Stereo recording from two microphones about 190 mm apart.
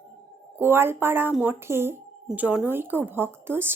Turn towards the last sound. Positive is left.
turn(degrees=-10)  # may be behind; listen again after turning